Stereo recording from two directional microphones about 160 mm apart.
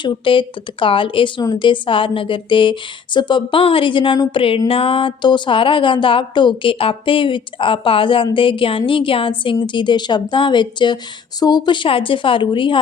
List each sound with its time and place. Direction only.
0.0 s a woman's voice: 30° left (ahead or behind)